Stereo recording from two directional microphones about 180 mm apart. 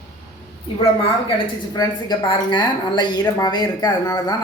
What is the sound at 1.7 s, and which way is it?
Speech, 25° left (ahead or behind).